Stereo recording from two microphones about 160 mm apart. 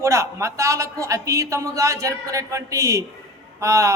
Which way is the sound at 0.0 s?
20° right (ahead or behind).